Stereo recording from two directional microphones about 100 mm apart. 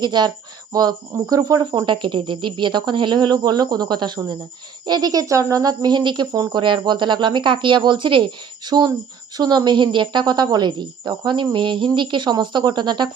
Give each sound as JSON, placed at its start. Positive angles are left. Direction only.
{"t": 0.0, "sound": "speech", "side_deg": -45}
{"t": 1.7, "sound": "speech", "side_deg": -50}